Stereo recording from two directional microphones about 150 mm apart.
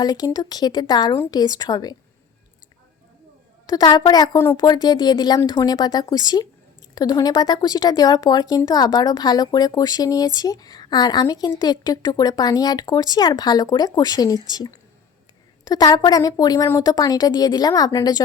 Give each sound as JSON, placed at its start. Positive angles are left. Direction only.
{"t": 0.0, "sound": "speech", "side_deg": 25}
{"t": 3.7, "sound": "speech", "side_deg": 30}